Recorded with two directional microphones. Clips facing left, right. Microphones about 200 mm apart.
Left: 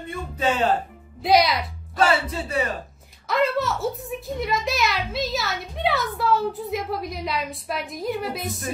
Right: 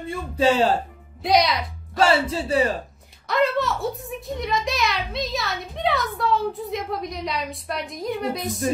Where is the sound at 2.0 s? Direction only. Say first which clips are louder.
Right 2 dB; 30° right (ahead or behind).